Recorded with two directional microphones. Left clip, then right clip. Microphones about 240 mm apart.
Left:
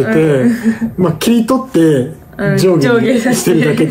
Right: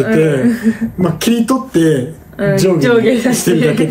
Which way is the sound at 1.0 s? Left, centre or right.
Centre.